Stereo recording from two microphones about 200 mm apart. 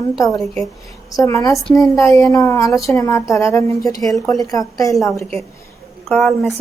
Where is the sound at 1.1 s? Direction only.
15° left (ahead or behind).